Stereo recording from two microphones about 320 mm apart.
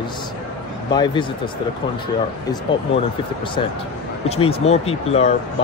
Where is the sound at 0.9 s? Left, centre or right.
Centre.